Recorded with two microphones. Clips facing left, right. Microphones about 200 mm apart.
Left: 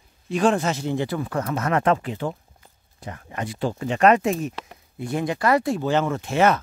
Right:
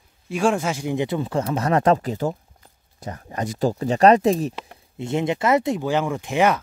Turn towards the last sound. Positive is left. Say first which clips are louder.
# even
turn(degrees=-15)  # may be behind; listen again after turning